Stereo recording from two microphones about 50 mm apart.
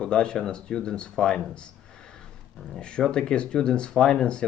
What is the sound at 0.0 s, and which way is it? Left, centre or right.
Speech, centre.